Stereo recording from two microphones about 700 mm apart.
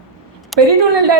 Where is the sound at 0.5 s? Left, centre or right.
Centre.